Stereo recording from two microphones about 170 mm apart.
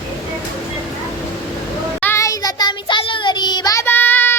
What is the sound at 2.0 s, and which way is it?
Child singing, 15° left (ahead or behind).